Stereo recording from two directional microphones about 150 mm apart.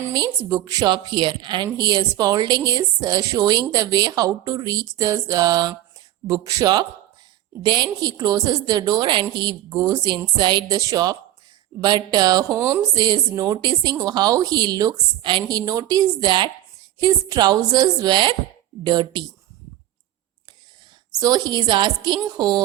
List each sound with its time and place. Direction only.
0.0 s a woman's voice: 25° right (ahead or behind)
21.1 s a woman's voice: 25° right (ahead or behind)